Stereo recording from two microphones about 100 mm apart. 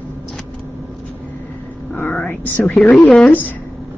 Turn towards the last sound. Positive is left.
turn(degrees=10)  # may be behind; listen again after turning